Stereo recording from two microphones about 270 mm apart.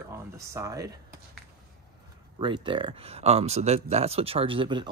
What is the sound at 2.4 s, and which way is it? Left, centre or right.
Speech, centre.